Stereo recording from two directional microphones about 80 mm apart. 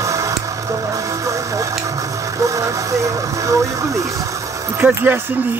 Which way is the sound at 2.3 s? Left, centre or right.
Right.